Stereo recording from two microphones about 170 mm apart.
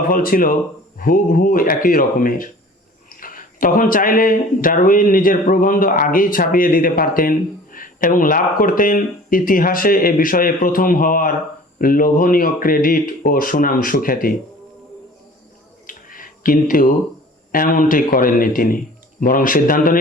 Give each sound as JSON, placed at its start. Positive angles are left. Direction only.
{"t": 0.1, "sound": "speech", "side_deg": 55}
{"t": 15.9, "sound": "a sound", "side_deg": 55}
{"t": 17.5, "sound": "speech", "side_deg": 55}